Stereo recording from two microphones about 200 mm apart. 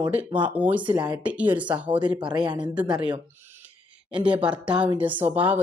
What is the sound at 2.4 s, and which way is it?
Speech, 20° right (ahead or behind).